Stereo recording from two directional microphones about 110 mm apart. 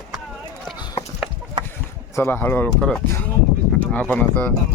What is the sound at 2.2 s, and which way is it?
Speech, 20° left (ahead or behind).